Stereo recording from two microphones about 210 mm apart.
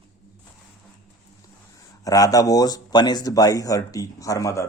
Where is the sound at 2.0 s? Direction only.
15° left (ahead or behind).